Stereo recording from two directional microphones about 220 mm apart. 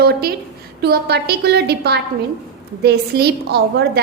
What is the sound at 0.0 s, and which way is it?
A woman's voice, 45° right (ahead or behind).